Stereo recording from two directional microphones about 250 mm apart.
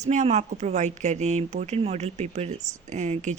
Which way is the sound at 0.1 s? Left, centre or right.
Right.